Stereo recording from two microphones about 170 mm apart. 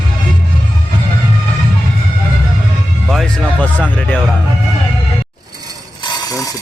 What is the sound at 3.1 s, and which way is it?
Speech, centre (ahead or behind).